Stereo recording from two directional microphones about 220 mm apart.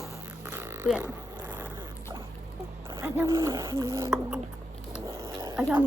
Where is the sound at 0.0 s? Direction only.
10° right (ahead or behind).